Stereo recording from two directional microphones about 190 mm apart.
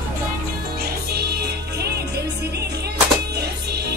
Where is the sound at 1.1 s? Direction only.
55° right (ahead or behind).